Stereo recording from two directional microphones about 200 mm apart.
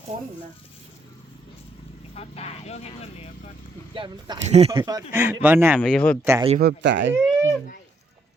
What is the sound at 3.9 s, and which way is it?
Speech, 25° right (ahead or behind).